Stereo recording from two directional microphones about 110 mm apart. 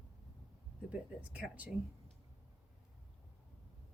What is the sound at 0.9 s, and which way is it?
Speech, 10° right (ahead or behind).